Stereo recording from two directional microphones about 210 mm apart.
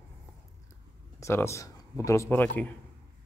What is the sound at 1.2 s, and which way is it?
Speech, 15° left (ahead or behind).